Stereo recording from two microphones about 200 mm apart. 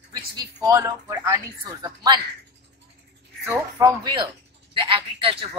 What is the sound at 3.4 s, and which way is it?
A man's voice, 15° right (ahead or behind).